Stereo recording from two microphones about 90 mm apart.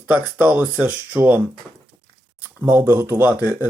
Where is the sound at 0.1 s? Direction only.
15° right (ahead or behind).